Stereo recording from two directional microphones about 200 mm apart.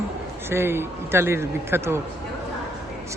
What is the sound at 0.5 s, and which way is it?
A man's voice, 10° right (ahead or behind).